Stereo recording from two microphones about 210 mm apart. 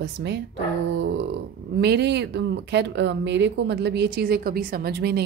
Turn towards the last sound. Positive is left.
turn(degrees=-50)  # may be behind; listen again after turning